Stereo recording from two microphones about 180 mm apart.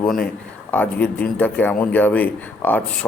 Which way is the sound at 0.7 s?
10° left (ahead or behind).